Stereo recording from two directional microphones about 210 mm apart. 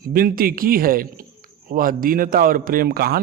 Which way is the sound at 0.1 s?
45° right (ahead or behind).